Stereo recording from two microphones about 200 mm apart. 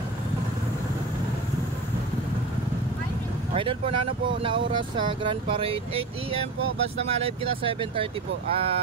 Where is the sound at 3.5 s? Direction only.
25° right (ahead or behind).